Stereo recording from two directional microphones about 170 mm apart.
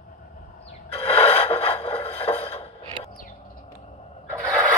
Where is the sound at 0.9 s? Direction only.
35° left (ahead or behind).